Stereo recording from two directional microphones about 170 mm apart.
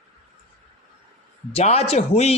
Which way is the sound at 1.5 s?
35° left (ahead or behind).